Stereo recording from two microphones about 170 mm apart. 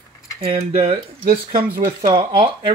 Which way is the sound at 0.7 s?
35° right (ahead or behind).